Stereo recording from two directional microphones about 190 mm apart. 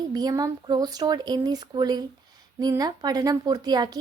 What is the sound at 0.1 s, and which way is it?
A woman's voice, 20° right (ahead or behind).